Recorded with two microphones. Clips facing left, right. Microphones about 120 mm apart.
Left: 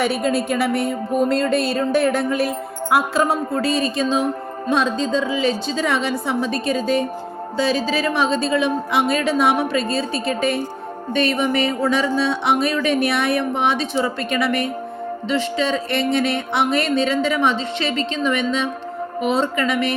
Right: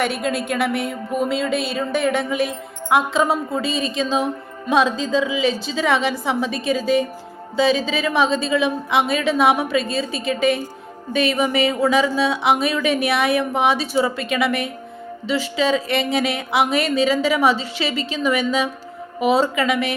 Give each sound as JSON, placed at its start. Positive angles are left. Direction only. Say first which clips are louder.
{"t": 0.0, "sound": "music", "louder": "left 2 dB", "side_deg": 0}